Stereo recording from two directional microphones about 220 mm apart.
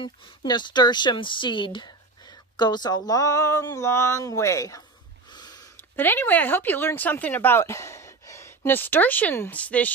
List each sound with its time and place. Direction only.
0.0 s speech: 20° left (ahead or behind)
2.5 s a sound: 20° left (ahead or behind)
5.3 s a woman's voice: 20° left (ahead or behind)